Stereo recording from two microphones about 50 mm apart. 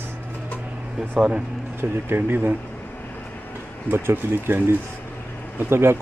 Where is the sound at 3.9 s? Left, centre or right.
Right.